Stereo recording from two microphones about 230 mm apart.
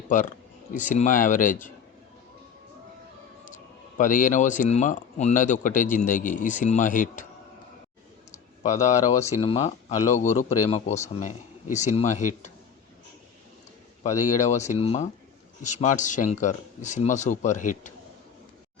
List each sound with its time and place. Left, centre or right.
0.7 s speech: left
3.4 s speech: left
8.6 s speech: left
14.0 s speech: left